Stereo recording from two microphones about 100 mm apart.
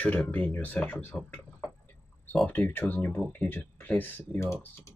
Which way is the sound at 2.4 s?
15° left (ahead or behind).